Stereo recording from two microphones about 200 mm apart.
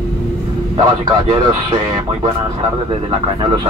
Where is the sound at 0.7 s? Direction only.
25° right (ahead or behind).